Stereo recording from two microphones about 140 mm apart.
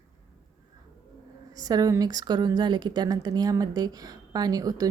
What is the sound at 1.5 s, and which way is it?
Speech, 25° right (ahead or behind).